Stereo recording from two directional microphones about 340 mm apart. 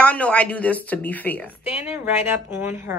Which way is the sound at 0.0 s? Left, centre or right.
Centre.